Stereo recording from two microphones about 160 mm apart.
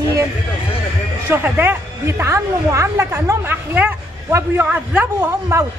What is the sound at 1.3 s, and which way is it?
A woman's voice, 10° right (ahead or behind).